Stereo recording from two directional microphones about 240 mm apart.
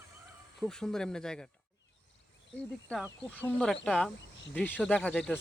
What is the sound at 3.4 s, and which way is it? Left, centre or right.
Speech, centre.